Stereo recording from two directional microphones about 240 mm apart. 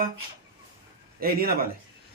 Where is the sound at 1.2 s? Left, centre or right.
Right.